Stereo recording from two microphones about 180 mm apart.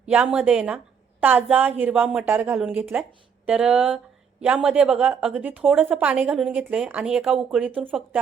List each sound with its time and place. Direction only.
0.0 s speech: 5° right (ahead or behind)